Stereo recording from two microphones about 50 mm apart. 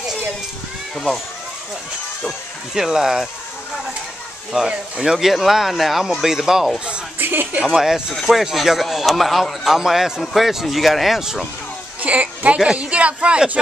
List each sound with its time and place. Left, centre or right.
2.7 s speech: centre
4.6 s speech: centre
7.2 s a sound: right
7.7 s speech: centre
12.0 s a man's voice: right